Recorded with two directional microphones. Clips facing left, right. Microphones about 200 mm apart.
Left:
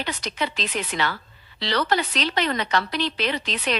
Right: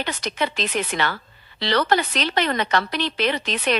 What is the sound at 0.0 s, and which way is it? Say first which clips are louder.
A woman's voice: right 3 dB; 50° right (ahead or behind).